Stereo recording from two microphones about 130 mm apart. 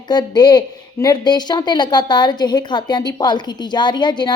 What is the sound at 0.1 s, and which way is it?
Speech, 35° left (ahead or behind).